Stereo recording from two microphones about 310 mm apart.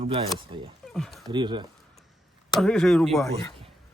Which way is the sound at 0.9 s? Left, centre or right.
Centre.